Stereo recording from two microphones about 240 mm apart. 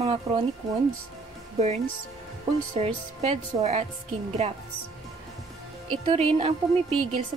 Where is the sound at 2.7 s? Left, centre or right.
Right.